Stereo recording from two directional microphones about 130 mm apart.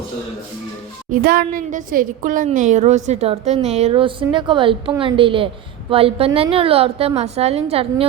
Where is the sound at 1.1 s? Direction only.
90° right.